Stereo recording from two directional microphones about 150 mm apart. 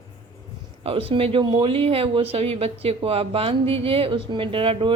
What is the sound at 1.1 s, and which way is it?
A woman's voice, 35° right (ahead or behind).